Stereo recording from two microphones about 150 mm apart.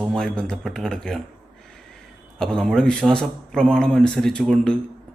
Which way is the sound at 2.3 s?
5° left (ahead or behind).